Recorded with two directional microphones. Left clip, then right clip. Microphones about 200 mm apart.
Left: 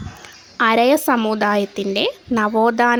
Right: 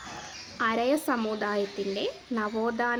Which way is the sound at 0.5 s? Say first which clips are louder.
Left 12 dB; 50° left (ahead or behind).